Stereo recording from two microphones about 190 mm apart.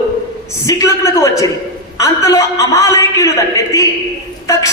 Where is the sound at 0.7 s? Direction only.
15° left (ahead or behind).